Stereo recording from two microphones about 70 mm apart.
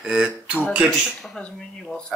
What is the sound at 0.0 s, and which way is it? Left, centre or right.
Speech, centre.